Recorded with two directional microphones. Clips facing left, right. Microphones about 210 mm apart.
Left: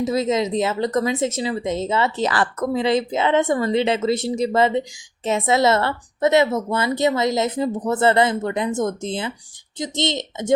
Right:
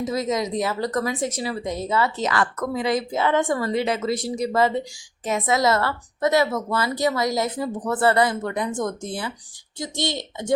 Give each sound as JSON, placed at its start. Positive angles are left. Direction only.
{"t": 0.0, "sound": "speech", "side_deg": 25}